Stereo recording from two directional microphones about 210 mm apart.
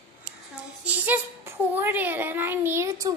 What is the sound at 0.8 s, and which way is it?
Speech, 10° right (ahead or behind).